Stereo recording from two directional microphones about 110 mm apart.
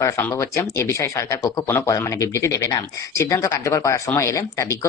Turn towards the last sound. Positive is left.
turn(degrees=25)  # may be behind; listen again after turning